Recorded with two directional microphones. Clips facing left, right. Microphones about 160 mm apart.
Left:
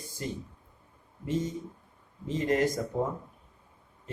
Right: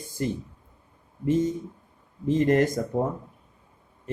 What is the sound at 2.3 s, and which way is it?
Speech, 55° right (ahead or behind).